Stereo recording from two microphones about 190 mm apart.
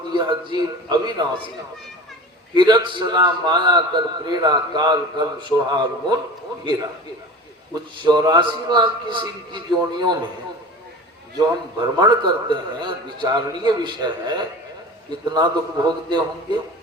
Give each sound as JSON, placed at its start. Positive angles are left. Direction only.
{"t": 0.1, "sound": "a man's voice", "side_deg": -25}
{"t": 2.6, "sound": "a man's voice", "side_deg": -25}
{"t": 7.7, "sound": "a man's voice", "side_deg": -20}
{"t": 11.3, "sound": "a man's voice", "side_deg": -20}